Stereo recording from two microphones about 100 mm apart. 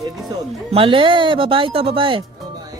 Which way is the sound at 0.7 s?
60° right (ahead or behind).